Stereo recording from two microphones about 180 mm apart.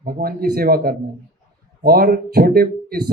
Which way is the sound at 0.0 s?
55° right (ahead or behind).